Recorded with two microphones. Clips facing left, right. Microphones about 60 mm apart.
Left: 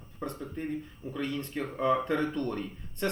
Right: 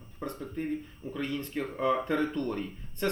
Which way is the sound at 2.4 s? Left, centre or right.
Right.